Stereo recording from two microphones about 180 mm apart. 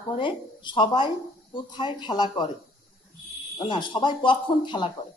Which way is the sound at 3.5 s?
25° left (ahead or behind).